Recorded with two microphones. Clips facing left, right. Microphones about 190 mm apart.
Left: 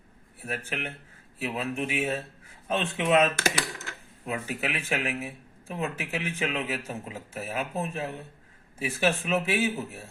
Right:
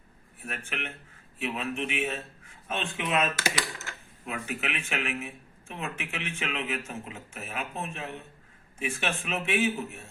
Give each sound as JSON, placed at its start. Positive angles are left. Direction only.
{"t": 0.4, "sound": "speech", "side_deg": 35}